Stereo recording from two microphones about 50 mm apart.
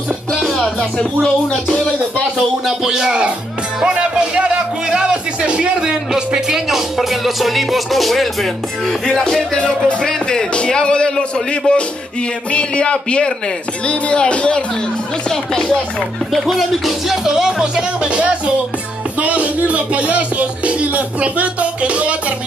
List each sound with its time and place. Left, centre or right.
0.4 s music: centre
2.6 s speech: centre; by 14.6 s left
16.4 s speech: centre; by 18.3 s right
19.1 s music: right